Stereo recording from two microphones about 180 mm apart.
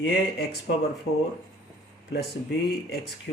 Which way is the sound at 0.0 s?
70° left (ahead or behind).